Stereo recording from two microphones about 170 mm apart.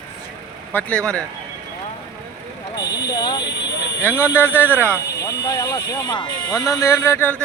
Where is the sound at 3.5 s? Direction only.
90° left.